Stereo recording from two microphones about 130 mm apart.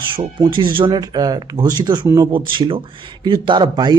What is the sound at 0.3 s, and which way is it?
A man's voice, 35° right (ahead or behind).